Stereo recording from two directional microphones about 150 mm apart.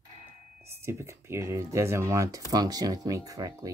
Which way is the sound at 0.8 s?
20° right (ahead or behind).